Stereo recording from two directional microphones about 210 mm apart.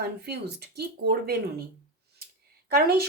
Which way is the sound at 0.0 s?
50° right (ahead or behind).